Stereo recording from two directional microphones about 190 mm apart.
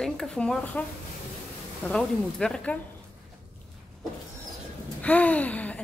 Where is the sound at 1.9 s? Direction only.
5° left (ahead or behind).